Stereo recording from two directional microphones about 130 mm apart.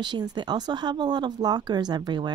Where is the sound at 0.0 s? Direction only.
30° right (ahead or behind).